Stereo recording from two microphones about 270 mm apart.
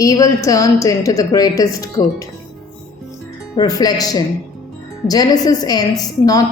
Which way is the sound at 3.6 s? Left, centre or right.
Centre.